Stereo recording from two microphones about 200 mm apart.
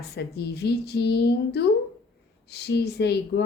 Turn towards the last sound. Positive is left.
turn(degrees=55)  # may be behind; listen again after turning